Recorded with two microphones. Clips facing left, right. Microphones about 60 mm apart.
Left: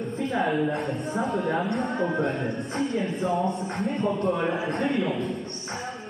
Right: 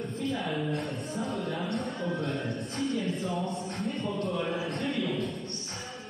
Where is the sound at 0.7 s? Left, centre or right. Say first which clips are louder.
Left 5 dB; left.